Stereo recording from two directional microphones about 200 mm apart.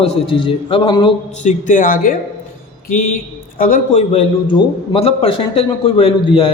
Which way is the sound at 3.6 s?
40° left (ahead or behind).